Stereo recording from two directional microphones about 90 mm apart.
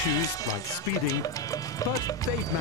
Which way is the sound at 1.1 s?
40° left (ahead or behind).